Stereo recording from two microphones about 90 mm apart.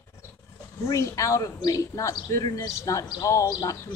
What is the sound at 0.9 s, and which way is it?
Speech, 35° left (ahead or behind).